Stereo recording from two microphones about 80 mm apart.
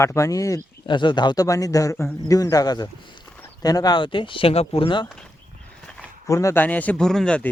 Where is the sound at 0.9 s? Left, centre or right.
Left.